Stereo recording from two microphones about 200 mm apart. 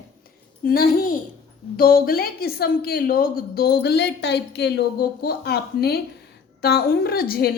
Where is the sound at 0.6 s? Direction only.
45° left (ahead or behind).